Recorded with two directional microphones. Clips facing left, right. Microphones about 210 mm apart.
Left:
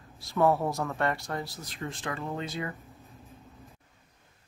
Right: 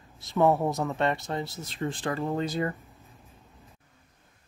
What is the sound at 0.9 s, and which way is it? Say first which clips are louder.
Speech: right 3 dB; 20° right (ahead or behind).